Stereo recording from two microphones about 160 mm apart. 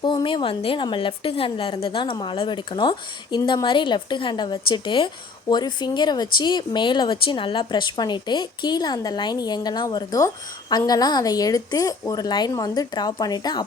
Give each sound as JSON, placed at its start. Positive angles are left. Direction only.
{"t": 0.0, "sound": "a woman's voice", "side_deg": 30}